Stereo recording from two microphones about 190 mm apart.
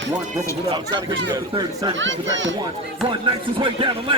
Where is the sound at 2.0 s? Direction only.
75° right (ahead or behind).